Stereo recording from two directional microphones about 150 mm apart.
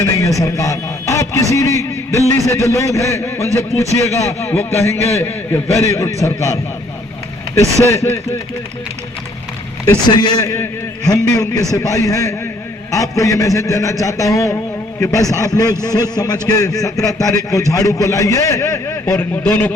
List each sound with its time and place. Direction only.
0.0 s a man's voice: 20° left (ahead or behind)
7.9 s a man's voice: 20° left (ahead or behind)
9.8 s a man's voice: 30° left (ahead or behind); by 19.7 s 15° left (ahead or behind)